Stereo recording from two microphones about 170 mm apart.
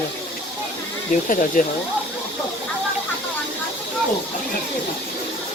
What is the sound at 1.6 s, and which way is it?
Speech, 50° left (ahead or behind).